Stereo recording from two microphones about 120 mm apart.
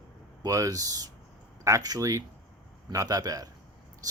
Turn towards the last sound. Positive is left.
turn(degrees=-30)  # may be behind; listen again after turning